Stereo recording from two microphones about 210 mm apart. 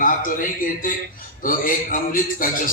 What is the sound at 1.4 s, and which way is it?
A man's voice, 40° left (ahead or behind).